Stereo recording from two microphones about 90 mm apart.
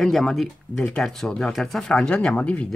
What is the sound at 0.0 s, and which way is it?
Speech, 5° left (ahead or behind).